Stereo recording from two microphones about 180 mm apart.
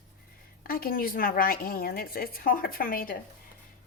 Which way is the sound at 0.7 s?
50° left (ahead or behind).